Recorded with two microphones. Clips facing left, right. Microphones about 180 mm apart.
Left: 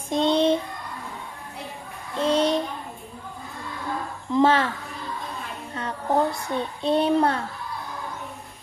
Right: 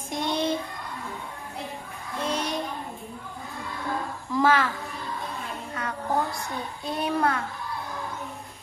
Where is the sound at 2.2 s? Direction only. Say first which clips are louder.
Left 8 dB; 30° left (ahead or behind).